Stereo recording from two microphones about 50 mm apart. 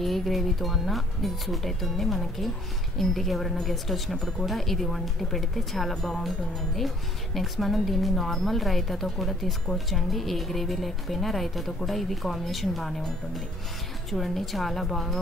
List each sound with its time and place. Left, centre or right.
0.0 s speech: centre